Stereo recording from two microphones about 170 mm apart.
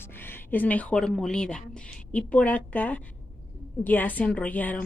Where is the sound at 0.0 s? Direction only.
10° left (ahead or behind).